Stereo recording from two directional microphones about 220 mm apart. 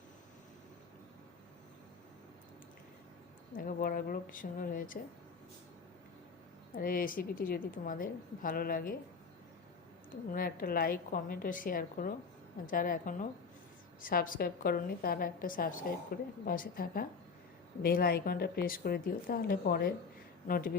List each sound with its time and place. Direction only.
3.5 s a woman's voice: 40° left (ahead or behind)
6.7 s a woman's voice: 40° left (ahead or behind)
10.3 s a woman's voice: 40° left (ahead or behind)